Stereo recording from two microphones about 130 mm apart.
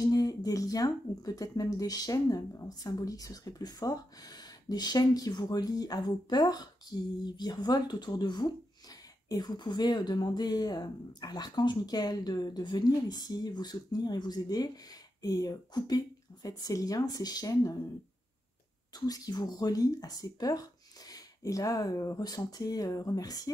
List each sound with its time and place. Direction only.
0.0 s speech: 30° left (ahead or behind)
18.9 s speech: 30° left (ahead or behind)